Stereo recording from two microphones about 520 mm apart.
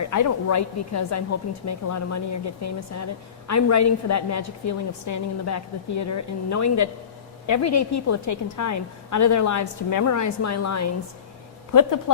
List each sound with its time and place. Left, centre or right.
0.0 s speech: left